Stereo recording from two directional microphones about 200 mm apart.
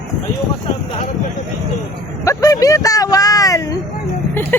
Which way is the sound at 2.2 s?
15° left (ahead or behind).